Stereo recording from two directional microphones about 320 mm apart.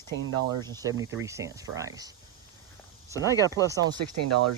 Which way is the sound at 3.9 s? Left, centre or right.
Right.